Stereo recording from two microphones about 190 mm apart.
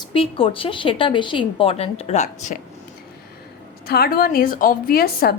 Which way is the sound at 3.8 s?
55° left (ahead or behind).